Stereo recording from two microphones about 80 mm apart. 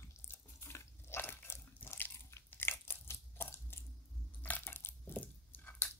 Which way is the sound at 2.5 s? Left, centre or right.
Left.